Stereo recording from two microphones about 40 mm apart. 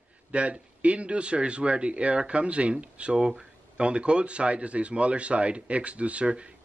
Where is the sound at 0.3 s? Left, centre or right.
Right.